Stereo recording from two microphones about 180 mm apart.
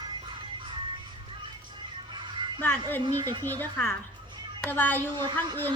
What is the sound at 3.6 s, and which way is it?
Speech, 10° left (ahead or behind).